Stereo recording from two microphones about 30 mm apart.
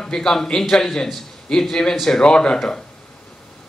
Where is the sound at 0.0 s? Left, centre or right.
Left.